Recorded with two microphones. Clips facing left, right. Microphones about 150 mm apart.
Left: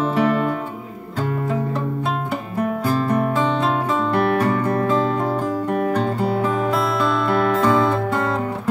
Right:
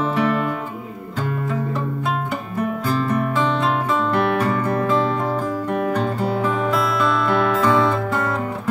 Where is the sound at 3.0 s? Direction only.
35° left (ahead or behind).